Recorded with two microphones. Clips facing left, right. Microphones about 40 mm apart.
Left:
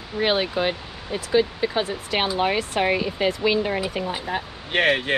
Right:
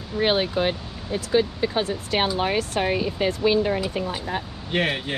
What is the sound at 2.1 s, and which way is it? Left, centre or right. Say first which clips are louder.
Speech: left 1 dB; left.